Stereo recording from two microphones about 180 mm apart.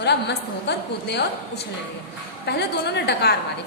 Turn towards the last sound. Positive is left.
turn(degrees=65)  # may be behind; listen again after turning